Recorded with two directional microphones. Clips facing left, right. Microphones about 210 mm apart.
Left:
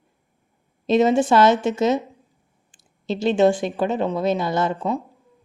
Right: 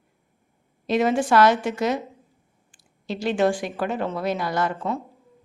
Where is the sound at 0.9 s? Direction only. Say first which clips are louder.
Left 4 dB; 25° left (ahead or behind).